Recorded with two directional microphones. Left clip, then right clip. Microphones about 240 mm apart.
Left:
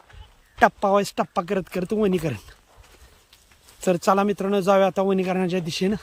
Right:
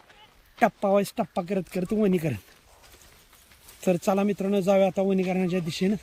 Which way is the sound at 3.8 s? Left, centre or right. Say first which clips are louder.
Left 5 dB; centre.